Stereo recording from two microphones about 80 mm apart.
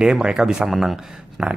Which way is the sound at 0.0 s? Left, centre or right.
Centre.